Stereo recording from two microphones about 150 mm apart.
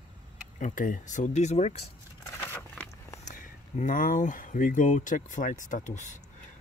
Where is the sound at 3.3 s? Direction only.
55° left (ahead or behind).